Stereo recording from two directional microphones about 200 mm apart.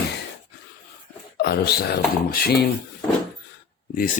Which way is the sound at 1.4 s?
55° left (ahead or behind).